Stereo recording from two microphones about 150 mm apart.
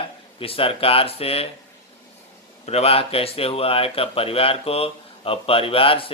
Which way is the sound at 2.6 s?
45° left (ahead or behind).